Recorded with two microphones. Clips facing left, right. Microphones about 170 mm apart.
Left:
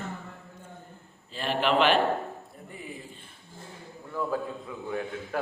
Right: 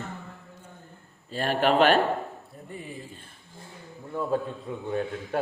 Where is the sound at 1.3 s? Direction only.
45° right (ahead or behind).